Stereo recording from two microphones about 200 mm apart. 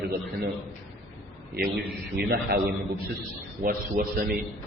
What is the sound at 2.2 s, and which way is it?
Speech, 50° right (ahead or behind).